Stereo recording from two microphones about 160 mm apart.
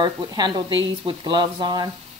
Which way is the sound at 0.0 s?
25° right (ahead or behind).